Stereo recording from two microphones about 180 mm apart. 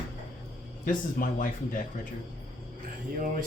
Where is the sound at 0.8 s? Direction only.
50° left (ahead or behind).